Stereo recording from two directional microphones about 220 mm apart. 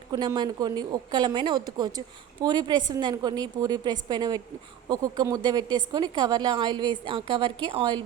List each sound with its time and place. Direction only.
0.1 s speech: 20° right (ahead or behind)